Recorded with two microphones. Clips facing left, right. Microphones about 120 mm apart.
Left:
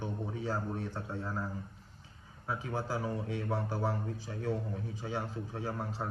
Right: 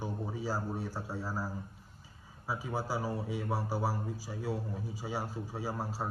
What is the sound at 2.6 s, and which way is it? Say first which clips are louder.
A man's voice: right 1 dB; 5° right (ahead or behind).